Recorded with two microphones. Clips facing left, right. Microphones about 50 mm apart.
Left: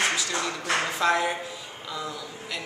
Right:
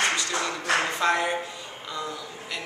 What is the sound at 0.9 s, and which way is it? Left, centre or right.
Speech, centre.